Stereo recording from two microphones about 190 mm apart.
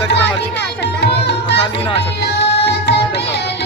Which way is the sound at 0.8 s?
60° left (ahead or behind).